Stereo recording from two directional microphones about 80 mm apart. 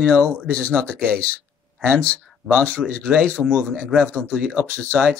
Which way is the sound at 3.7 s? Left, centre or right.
Centre.